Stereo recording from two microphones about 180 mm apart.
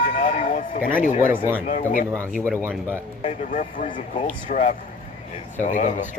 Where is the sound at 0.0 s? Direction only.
45° left (ahead or behind).